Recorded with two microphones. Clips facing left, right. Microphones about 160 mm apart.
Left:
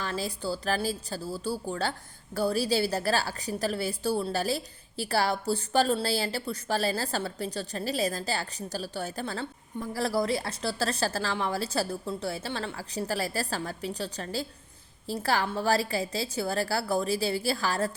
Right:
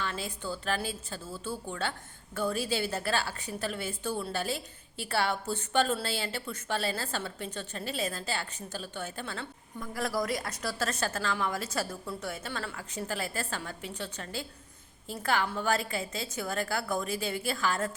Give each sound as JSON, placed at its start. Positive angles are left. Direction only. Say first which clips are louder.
{"t": 0.0, "sound": "a woman's voice", "louder": "left 4 dB", "side_deg": 35}